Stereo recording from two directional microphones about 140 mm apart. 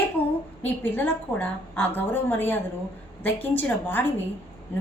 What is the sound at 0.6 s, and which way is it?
A woman's voice, 15° left (ahead or behind).